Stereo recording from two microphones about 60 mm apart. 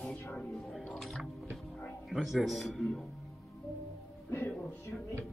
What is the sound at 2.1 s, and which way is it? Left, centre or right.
Speech, centre.